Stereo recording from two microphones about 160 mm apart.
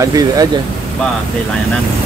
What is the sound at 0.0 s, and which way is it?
Speech, 20° right (ahead or behind).